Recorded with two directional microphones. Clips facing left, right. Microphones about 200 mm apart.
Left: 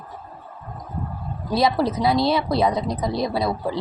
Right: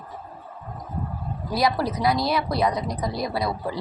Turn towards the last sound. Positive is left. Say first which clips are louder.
# left 3 dB
turn(degrees=25)  # may be behind; listen again after turning